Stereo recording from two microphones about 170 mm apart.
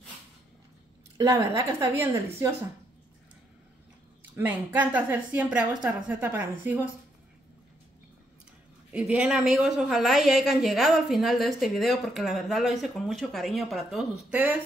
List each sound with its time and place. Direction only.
1.1 s a woman's voice: 20° right (ahead or behind)
4.4 s a woman's voice: 10° right (ahead or behind)
8.9 s a woman's voice: 5° right (ahead or behind)